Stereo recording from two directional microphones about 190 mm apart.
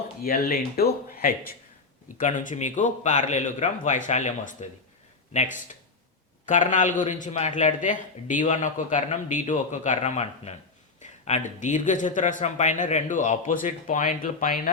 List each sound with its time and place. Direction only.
0.2 s a man's voice: 50° left (ahead or behind)
6.4 s a man's voice: 40° left (ahead or behind)